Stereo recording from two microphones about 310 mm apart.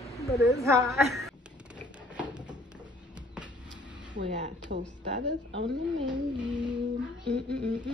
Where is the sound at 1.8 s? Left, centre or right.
Centre.